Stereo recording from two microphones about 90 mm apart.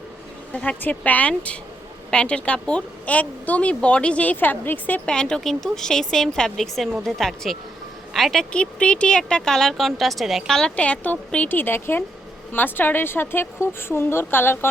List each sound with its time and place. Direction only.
0.5 s speech: 15° left (ahead or behind)
5.0 s a woman's voice: 10° left (ahead or behind); by 14.7 s 25° left (ahead or behind)